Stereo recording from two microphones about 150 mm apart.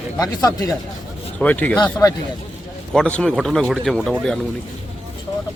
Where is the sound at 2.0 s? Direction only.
20° left (ahead or behind).